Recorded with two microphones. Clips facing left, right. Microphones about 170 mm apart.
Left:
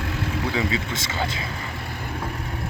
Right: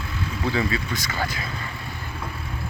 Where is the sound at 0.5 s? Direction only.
20° left (ahead or behind).